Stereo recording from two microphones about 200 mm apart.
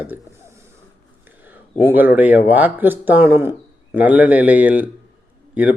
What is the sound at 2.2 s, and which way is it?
A man's voice, 10° right (ahead or behind).